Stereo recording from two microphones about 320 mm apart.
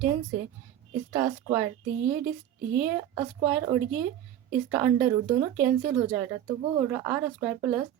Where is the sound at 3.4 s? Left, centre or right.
Centre.